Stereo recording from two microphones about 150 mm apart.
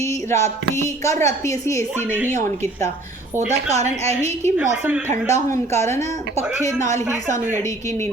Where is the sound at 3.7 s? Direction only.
45° right (ahead or behind).